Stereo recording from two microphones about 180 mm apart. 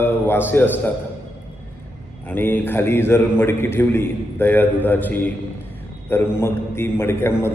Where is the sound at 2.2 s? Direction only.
10° left (ahead or behind).